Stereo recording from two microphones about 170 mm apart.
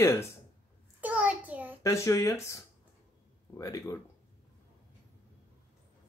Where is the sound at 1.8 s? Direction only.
20° left (ahead or behind).